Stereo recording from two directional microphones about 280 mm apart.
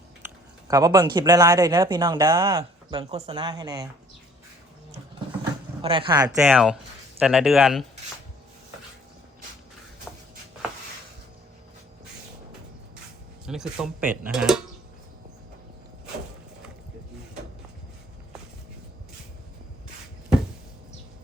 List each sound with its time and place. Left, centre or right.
0.7 s speech: centre
5.8 s speech: centre
6.2 s speech: centre
13.5 s speech: centre